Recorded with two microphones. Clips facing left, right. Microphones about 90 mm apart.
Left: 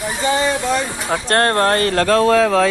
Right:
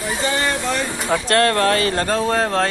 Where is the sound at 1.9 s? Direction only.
90° left.